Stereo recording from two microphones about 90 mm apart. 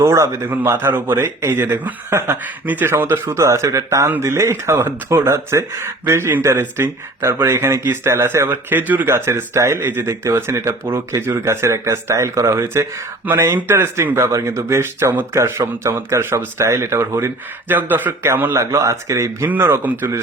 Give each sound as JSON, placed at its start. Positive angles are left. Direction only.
{"t": 0.0, "sound": "speech", "side_deg": -30}